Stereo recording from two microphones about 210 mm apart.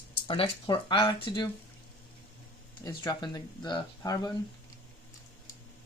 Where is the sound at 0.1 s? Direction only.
25° left (ahead or behind).